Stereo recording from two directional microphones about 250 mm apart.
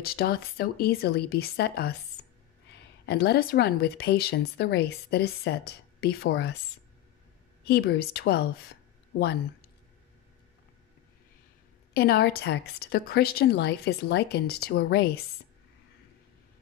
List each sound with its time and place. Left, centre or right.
0.0 s speech: left
3.1 s speech: left
7.6 s speech: left
11.9 s speech: left